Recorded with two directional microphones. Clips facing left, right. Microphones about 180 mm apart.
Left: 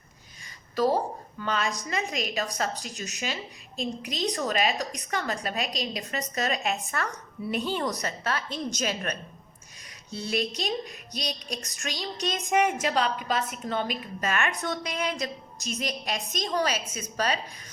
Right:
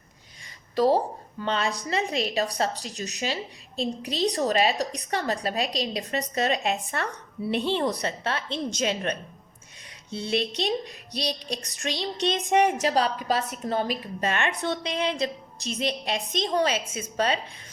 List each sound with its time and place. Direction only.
1.4 s a woman's voice: 30° right (ahead or behind)